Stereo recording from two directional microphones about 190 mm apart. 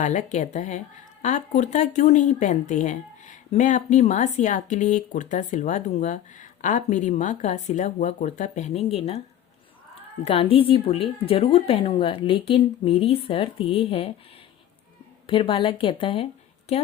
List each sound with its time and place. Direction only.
0.0 s speech: 40° left (ahead or behind)
10.2 s speech: 30° left (ahead or behind)
15.3 s a woman's voice: 25° left (ahead or behind)